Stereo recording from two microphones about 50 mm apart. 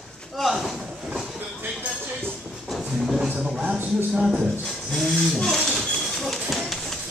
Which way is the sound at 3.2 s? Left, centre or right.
Centre.